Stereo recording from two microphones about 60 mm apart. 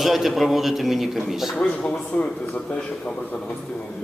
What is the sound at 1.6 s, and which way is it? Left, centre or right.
Speech, left.